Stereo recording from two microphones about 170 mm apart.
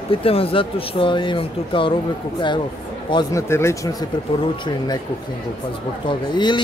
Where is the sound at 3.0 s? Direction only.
25° left (ahead or behind).